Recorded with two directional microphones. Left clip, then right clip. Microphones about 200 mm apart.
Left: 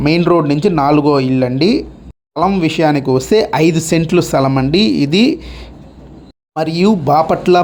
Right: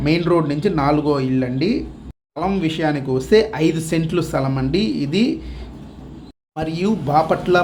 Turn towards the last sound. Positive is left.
turn(degrees=40)  # may be behind; listen again after turning